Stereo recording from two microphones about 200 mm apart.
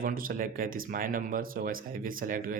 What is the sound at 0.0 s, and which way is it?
Speech, 45° right (ahead or behind).